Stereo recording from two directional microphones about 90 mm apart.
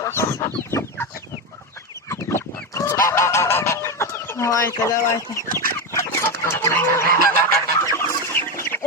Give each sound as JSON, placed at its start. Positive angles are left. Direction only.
{"t": 0.0, "sound": "chicken", "side_deg": 30}
{"t": 2.7, "sound": "fowl", "side_deg": 35}
{"t": 6.9, "sound": "goose", "side_deg": 30}
{"t": 7.9, "sound": "chicken", "side_deg": 30}